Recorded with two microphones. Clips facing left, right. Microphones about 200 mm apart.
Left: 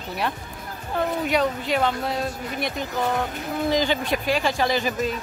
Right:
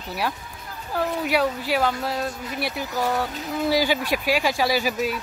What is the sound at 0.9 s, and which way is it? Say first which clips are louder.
Speech: even; 5° right (ahead or behind).